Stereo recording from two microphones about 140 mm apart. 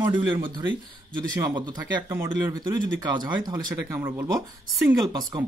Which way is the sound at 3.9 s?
15° right (ahead or behind).